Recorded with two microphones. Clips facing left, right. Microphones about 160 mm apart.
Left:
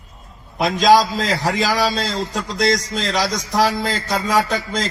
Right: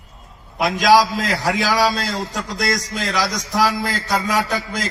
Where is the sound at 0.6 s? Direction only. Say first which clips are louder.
Left 1 dB; 20° left (ahead or behind).